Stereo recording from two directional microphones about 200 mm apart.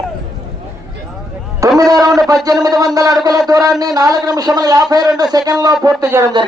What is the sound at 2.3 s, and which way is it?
A man's voice, 20° right (ahead or behind).